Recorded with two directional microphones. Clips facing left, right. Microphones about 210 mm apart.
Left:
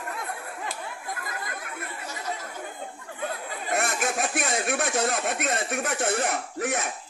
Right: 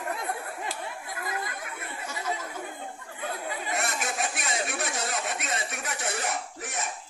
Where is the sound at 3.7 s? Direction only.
50° left (ahead or behind).